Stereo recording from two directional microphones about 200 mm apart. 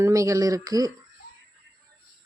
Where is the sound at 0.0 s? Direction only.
15° right (ahead or behind).